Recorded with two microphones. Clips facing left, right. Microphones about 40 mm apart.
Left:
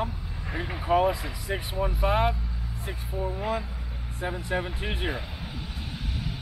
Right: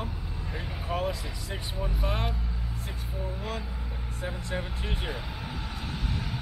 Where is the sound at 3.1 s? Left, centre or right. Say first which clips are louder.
Left 6 dB; centre.